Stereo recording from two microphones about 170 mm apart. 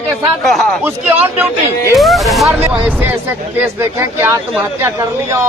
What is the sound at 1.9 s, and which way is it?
A man's voice, centre (ahead or behind).